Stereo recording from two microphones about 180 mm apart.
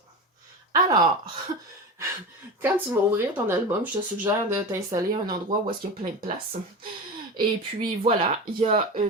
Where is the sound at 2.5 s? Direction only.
15° right (ahead or behind).